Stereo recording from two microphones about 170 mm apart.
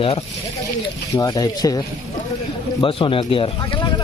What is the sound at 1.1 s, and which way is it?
Speech, 20° left (ahead or behind).